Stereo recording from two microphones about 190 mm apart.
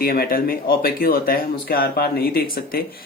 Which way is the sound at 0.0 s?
50° left (ahead or behind).